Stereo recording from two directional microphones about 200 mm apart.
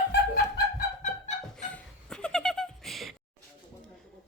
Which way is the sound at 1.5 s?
5° left (ahead or behind).